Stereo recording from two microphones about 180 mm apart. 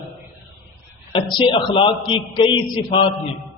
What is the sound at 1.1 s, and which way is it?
A man's voice, 30° left (ahead or behind).